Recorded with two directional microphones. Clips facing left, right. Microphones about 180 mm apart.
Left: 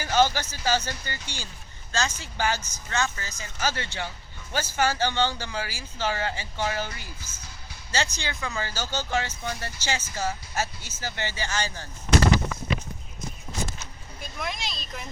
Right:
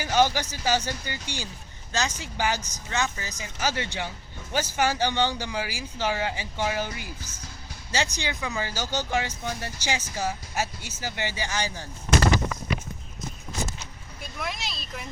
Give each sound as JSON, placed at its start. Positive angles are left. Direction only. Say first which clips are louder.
{"t": 0.0, "sound": "speech", "louder": "even", "side_deg": -15}
{"t": 14.2, "sound": "speech", "louder": "even", "side_deg": 0}